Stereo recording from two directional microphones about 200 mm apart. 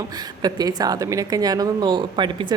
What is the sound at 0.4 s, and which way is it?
A woman's voice, 20° right (ahead or behind).